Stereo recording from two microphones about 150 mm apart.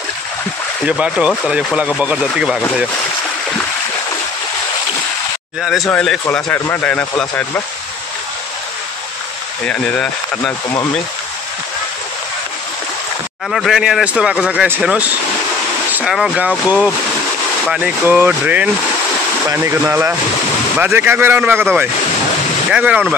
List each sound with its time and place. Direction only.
0.8 s a man's voice: 5° right (ahead or behind)
5.6 s speech: centre (ahead or behind)
5.9 s speech: 10° left (ahead or behind)
9.7 s speech: 10° left (ahead or behind)
13.5 s a man's voice: centre (ahead or behind)